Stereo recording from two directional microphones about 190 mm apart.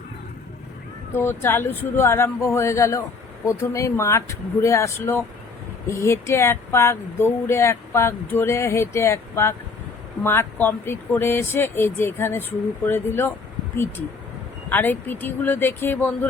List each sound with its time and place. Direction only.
1.1 s speech: 10° left (ahead or behind)
14.7 s speech: 10° left (ahead or behind)